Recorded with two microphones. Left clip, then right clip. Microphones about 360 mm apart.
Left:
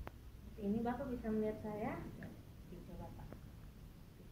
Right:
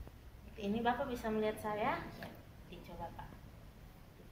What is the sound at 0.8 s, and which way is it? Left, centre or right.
A woman's voice, right.